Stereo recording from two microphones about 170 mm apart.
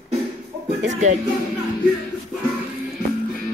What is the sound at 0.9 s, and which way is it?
Speech, 45° right (ahead or behind).